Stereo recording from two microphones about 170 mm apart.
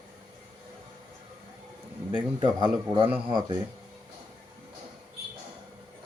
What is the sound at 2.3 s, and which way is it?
A man's voice, 30° right (ahead or behind).